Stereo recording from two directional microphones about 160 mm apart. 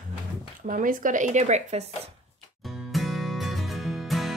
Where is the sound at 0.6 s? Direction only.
55° right (ahead or behind).